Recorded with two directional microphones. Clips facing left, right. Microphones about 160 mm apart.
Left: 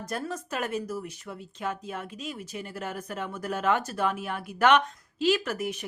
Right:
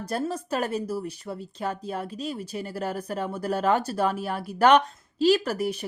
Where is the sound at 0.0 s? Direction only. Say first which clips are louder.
Right 5 dB; 30° right (ahead or behind).